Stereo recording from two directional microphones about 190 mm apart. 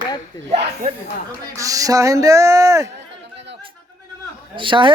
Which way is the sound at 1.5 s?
20° right (ahead or behind).